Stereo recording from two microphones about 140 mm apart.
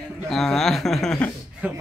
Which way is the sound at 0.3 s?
Centre (ahead or behind).